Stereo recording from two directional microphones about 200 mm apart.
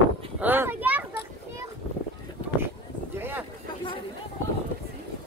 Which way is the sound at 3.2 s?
10° right (ahead or behind).